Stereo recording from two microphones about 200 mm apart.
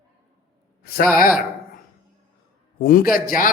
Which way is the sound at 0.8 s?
50° left (ahead or behind).